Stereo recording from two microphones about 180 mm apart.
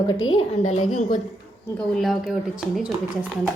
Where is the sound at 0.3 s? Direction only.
40° left (ahead or behind).